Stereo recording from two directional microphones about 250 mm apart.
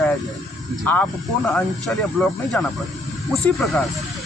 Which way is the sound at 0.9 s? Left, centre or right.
Centre.